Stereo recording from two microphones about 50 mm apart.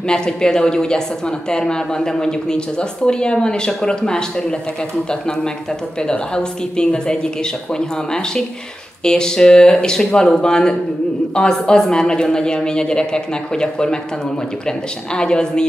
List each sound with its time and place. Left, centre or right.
0.1 s speech: centre
6.0 s speech: centre
15.1 s speech: centre